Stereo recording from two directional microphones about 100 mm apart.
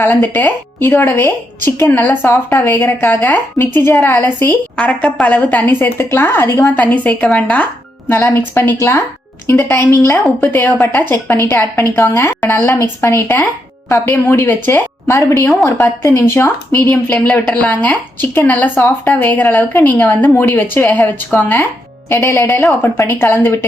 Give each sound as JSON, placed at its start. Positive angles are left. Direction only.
{"t": 0.0, "sound": "a woman's voice", "side_deg": 20}
{"t": 6.7, "sound": "a woman's voice", "side_deg": 15}
{"t": 15.0, "sound": "a woman's voice", "side_deg": 30}
{"t": 16.9, "sound": "a woman's voice", "side_deg": 10}